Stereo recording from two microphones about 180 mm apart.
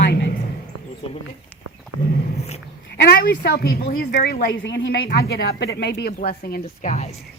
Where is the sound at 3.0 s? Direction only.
65° left (ahead or behind).